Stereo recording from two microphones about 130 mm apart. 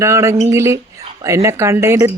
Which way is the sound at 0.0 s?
25° right (ahead or behind).